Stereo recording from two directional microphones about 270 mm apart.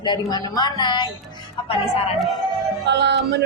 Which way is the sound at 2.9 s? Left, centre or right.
Right.